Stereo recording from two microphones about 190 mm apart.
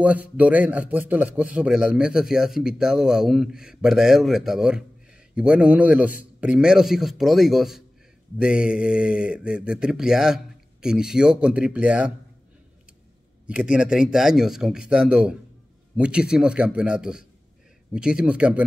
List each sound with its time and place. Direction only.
0.0 s a man's voice: 5° right (ahead or behind)
13.5 s a man's voice: 5° right (ahead or behind)